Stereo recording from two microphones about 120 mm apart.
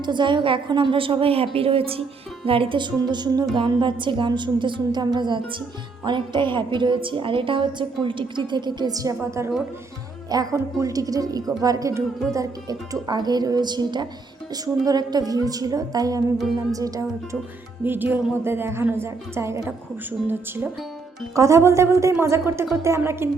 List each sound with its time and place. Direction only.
0.0 s a woman's voice: 40° right (ahead or behind)
17.8 s a woman's voice: 15° right (ahead or behind)